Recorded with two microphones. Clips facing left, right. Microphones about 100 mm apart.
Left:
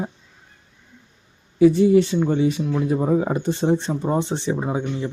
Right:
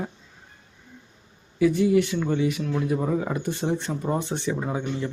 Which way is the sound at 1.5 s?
25° left (ahead or behind).